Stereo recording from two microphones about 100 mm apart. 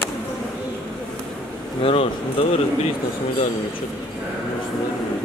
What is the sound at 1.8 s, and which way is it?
Speech, 75° left (ahead or behind).